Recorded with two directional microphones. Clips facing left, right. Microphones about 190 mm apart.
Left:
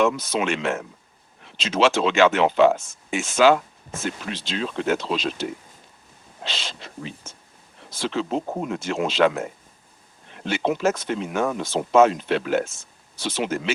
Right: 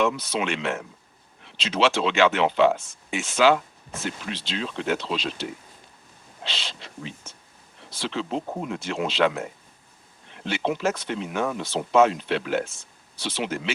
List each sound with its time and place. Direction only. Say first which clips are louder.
0.0 s speech: left 3 dB; 45° left (ahead or behind)